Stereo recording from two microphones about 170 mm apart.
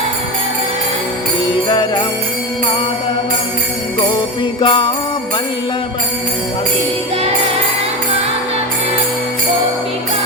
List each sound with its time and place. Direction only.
4.6 s jingle bell: 30° left (ahead or behind)